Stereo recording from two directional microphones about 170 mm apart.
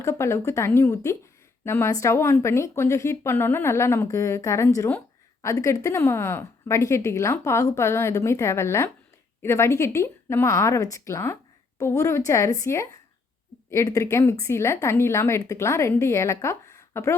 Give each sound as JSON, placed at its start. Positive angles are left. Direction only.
{"t": 0.0, "sound": "a woman's voice", "side_deg": 15}